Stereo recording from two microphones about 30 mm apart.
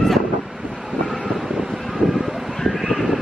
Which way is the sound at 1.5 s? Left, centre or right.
Centre.